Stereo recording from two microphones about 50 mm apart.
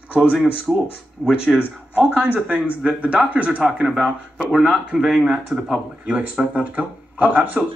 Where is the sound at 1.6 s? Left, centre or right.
Left.